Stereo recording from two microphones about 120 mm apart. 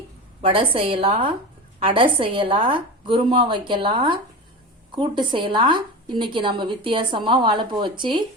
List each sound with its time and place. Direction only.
0.4 s a woman's voice: 50° right (ahead or behind)